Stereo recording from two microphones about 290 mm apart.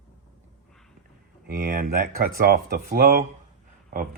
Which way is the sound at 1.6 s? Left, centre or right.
Right.